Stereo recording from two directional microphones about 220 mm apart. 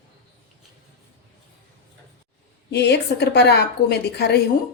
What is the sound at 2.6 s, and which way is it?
Speech, 50° left (ahead or behind).